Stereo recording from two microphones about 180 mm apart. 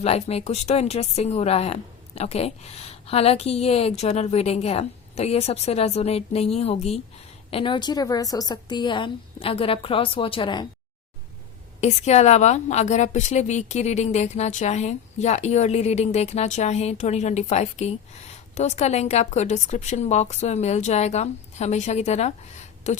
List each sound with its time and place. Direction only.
0.0 s a woman's voice: 35° left (ahead or behind)
11.8 s a woman's voice: 35° left (ahead or behind)